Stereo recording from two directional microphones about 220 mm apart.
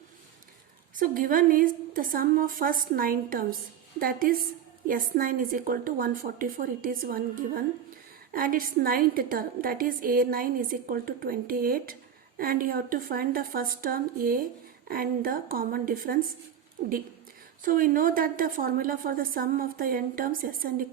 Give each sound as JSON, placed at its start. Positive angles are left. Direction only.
{"t": 0.9, "sound": "a woman's voice", "side_deg": -40}
{"t": 17.6, "sound": "a woman's voice", "side_deg": -40}